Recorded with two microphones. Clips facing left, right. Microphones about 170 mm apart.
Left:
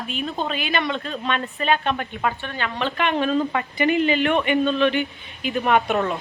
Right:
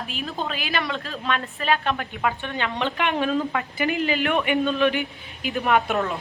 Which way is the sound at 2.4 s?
20° right (ahead or behind).